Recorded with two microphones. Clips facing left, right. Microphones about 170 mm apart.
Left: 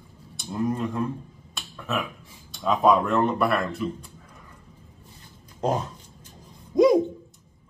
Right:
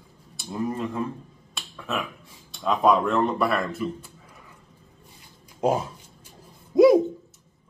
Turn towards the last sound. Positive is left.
turn(degrees=-5)  # may be behind; listen again after turning